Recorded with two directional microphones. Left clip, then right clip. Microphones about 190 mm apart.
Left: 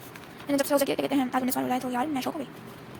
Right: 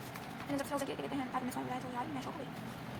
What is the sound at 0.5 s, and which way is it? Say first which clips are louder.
A woman's voice: left 14 dB; 45° left (ahead or behind).